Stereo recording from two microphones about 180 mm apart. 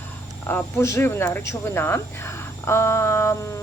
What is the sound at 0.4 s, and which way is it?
Speech, 15° left (ahead or behind).